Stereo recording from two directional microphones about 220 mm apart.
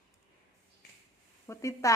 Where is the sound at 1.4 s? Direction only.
15° left (ahead or behind).